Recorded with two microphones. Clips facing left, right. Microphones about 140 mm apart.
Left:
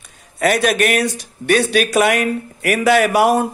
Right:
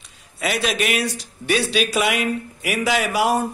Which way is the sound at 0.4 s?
55° left (ahead or behind).